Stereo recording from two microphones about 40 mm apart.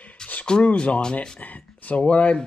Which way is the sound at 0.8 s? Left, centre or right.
Left.